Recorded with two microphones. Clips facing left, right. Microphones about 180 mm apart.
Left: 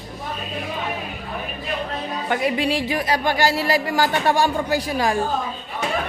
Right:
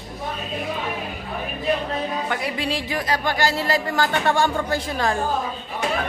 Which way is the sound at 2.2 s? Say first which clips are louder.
Left 4 dB; 15° left (ahead or behind).